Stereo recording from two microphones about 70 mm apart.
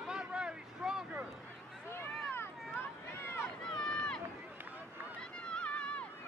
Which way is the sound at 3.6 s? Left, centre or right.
Centre.